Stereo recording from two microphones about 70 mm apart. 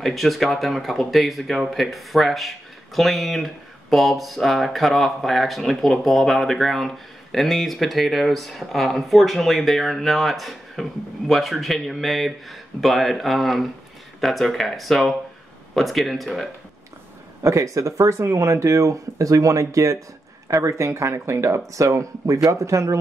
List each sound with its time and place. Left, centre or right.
0.0 s speech: centre
17.4 s speech: right